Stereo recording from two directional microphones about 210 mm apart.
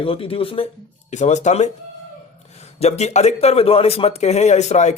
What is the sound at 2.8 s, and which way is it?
A man's voice, 30° left (ahead or behind).